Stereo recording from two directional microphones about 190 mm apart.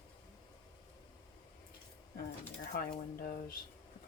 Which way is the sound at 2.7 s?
55° left (ahead or behind).